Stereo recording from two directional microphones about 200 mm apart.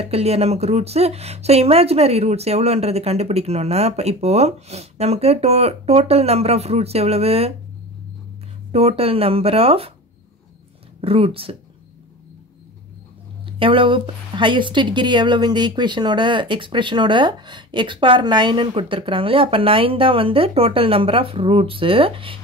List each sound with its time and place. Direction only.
0.0 s speech: 30° right (ahead or behind)
8.7 s speech: 30° right (ahead or behind)
11.0 s speech: 30° right (ahead or behind)
13.5 s speech: 25° right (ahead or behind)